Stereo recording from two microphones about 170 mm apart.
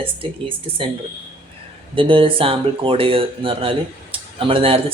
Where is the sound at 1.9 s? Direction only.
30° right (ahead or behind).